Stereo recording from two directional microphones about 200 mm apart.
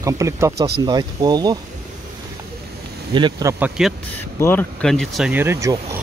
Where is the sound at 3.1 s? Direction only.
20° right (ahead or behind).